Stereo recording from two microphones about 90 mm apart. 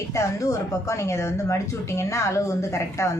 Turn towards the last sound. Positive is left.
turn(degrees=35)  # may be behind; listen again after turning